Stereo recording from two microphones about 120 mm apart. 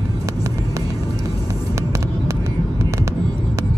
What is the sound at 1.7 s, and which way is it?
Vehicle, 25° right (ahead or behind).